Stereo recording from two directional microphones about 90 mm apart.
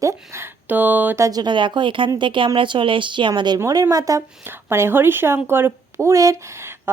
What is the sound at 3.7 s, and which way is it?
Speech, 45° right (ahead or behind).